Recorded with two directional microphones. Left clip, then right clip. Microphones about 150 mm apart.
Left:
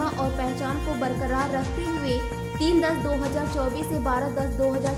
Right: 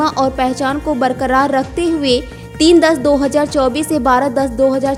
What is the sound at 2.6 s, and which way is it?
A woman's voice, 55° right (ahead or behind).